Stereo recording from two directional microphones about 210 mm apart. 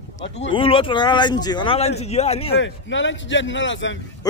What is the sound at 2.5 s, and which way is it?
A man's voice, 60° left (ahead or behind).